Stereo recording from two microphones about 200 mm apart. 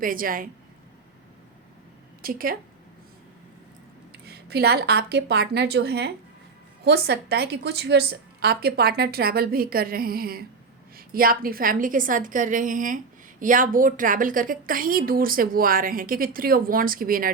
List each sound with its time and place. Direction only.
0.0 s a woman's voice: 45° right (ahead or behind)
2.2 s a woman's voice: 45° right (ahead or behind)
4.1 s a woman's voice: 55° right (ahead or behind)